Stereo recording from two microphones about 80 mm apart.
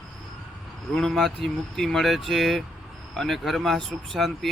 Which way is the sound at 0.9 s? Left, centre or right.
Centre.